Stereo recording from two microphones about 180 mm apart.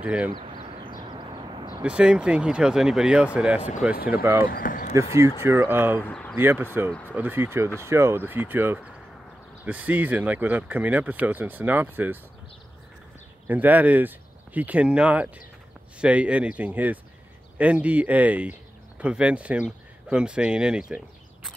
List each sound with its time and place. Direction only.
0.0 s speech: 5° right (ahead or behind)
0.3 s a sound: 25° right (ahead or behind)
1.8 s speech: 5° right (ahead or behind)
3.9 s speech: 55° left (ahead or behind)
4.2 s speech: 10° right (ahead or behind)
4.5 s speech: 55° left (ahead or behind)
5.4 s speech: 15° right (ahead or behind)
6.0 s speech: 10° left (ahead or behind)
6.3 s speech: 10° right (ahead or behind)
13.5 s speech: 10° right (ahead or behind)